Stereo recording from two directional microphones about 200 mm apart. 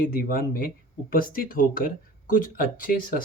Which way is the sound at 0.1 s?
45° left (ahead or behind).